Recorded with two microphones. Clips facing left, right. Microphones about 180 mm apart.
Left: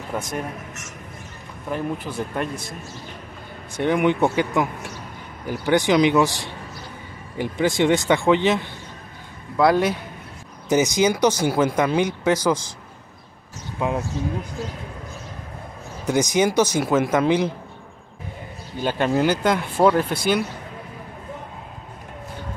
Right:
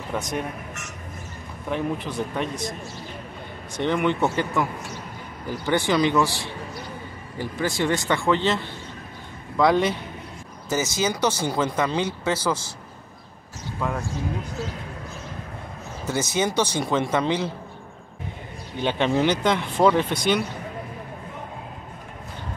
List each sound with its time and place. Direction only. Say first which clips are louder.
0.1 s speech: even; 5° left (ahead or behind)
1.7 s speech: even; 5° left (ahead or behind)
3.7 s speech: left 3 dB; 10° left (ahead or behind)
10.7 s speech: left 6 dB; 15° left (ahead or behind)
16.1 s speech: left 5 dB; 15° left (ahead or behind)
18.8 s speech: left 1 dB; 5° left (ahead or behind)